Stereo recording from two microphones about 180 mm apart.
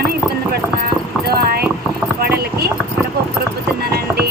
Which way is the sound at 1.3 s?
60° right (ahead or behind).